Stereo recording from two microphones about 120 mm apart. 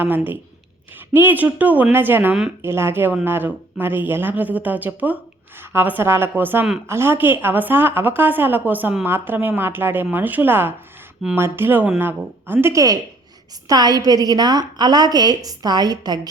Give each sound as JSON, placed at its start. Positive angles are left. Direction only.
{"t": 0.0, "sound": "a woman's voice", "side_deg": -15}